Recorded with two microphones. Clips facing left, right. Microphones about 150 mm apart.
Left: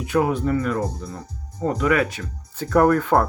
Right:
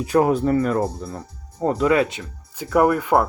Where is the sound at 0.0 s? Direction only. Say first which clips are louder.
Right 3 dB; 40° right (ahead or behind); by 2.2 s 25° right (ahead or behind).